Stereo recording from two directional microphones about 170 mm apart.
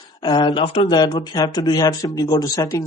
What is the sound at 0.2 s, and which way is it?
Speech, 25° left (ahead or behind).